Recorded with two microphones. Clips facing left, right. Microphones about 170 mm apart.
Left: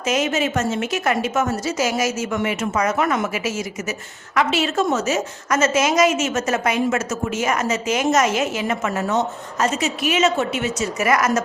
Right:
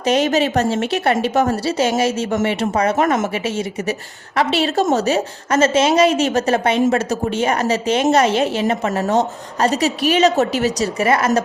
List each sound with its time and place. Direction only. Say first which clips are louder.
0.0 s a woman's voice: right 5 dB; 35° right (ahead or behind)